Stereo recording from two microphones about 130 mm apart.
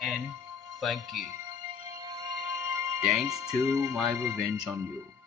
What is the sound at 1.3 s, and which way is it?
Music, 25° right (ahead or behind).